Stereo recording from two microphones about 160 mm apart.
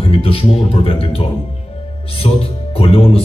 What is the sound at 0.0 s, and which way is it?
A man's voice, 35° left (ahead or behind).